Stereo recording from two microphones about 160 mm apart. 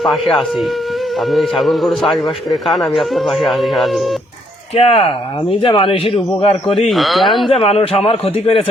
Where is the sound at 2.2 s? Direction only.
25° left (ahead or behind).